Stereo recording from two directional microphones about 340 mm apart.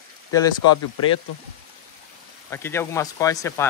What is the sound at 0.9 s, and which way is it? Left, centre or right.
Speech, left.